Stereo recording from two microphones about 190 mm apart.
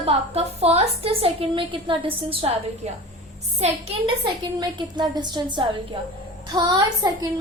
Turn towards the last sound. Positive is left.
turn(degrees=-20)  # may be behind; listen again after turning